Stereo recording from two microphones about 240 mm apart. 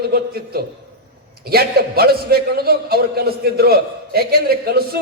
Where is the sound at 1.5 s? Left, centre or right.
Right.